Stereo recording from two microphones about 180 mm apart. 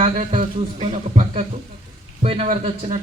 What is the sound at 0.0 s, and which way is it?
A man's voice, 35° right (ahead or behind).